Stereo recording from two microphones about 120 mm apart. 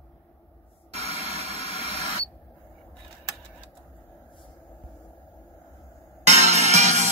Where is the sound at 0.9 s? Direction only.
65° right (ahead or behind).